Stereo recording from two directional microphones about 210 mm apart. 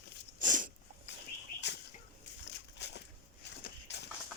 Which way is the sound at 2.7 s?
55° left (ahead or behind).